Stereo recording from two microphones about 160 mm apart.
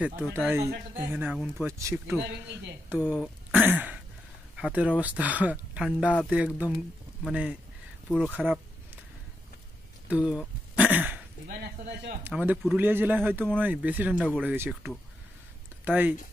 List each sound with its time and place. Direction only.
0.3 s speech: 10° right (ahead or behind)
2.9 s speech: 5° right (ahead or behind)
8.2 s a sound: 10° right (ahead or behind)
10.0 s throat clearing: 5° right (ahead or behind)
11.4 s speech: 70° right (ahead or behind)
12.2 s speech: 15° right (ahead or behind)